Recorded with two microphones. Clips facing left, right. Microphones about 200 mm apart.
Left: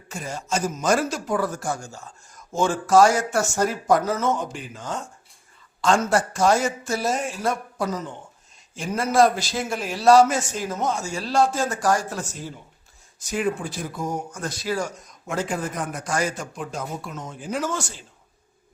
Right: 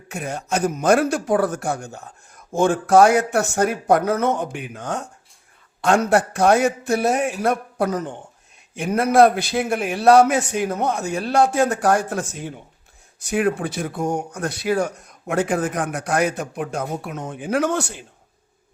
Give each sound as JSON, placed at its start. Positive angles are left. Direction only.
{"t": 0.1, "sound": "a man's voice", "side_deg": -60}
{"t": 15.6, "sound": "a man's voice", "side_deg": -75}